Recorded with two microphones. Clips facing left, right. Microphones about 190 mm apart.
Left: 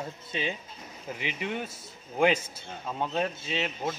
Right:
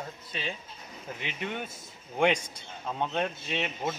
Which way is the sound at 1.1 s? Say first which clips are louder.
Left 2 dB; 5° left (ahead or behind).